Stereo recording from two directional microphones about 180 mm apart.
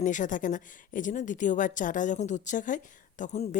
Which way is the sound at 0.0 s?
45° left (ahead or behind).